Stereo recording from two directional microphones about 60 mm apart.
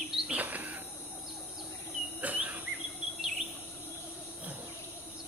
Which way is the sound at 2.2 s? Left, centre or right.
Right.